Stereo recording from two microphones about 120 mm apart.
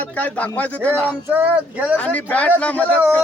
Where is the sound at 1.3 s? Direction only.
15° right (ahead or behind).